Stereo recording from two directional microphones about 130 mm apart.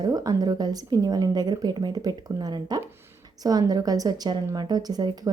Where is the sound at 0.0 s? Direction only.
30° right (ahead or behind).